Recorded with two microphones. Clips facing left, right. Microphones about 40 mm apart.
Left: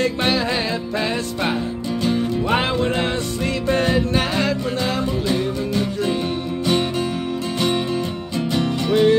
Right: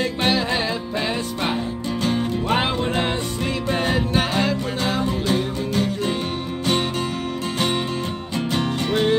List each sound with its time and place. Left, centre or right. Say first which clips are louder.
0.0 s music: left 1 dB; centre
3.8 s music: left 2 dB; centre
5.0 s music: left 1 dB; right
7.5 s music: left 3 dB; right